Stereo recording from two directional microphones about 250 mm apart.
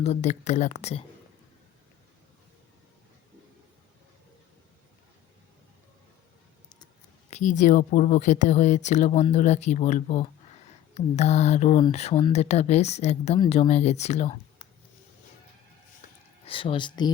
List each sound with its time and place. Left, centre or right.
0.0 s speech: left
7.3 s speech: left
16.0 s a sound: left
16.5 s speech: left